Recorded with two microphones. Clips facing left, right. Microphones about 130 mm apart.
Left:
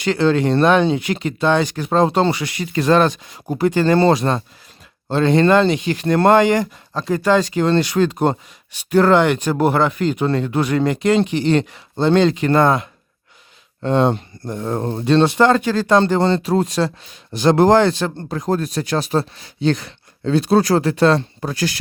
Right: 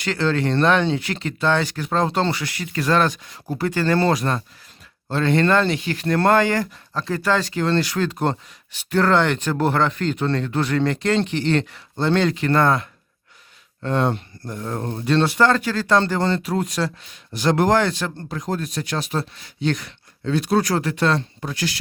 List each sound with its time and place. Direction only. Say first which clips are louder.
0.0 s speech: left 5 dB; 20° left (ahead or behind)
18.3 s speech: left 7 dB; 40° left (ahead or behind)